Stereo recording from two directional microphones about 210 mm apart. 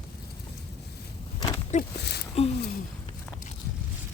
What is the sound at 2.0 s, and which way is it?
Speech, 55° left (ahead or behind).